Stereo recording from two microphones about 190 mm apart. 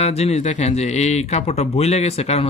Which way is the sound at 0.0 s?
35° left (ahead or behind).